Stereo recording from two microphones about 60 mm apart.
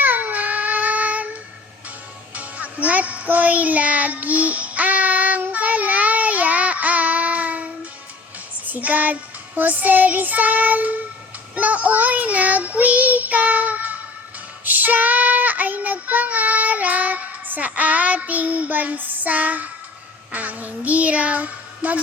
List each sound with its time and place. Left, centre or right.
0.0 s a sound: right
2.3 s music: right
8.6 s child singing: right
9.6 s speech: right
11.5 s child singing: right
20.3 s speech: right